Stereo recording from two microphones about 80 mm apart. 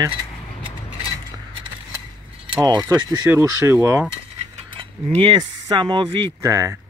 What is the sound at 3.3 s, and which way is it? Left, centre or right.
Speech, right.